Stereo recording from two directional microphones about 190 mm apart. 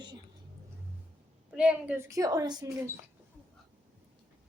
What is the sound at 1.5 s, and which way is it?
A woman's voice, 5° right (ahead or behind).